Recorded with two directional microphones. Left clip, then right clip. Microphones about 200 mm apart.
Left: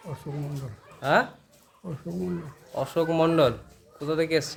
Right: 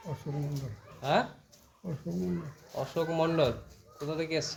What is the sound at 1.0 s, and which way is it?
Speech, 30° left (ahead or behind).